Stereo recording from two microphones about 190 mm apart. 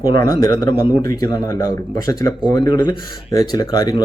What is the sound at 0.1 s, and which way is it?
Speech, 20° left (ahead or behind).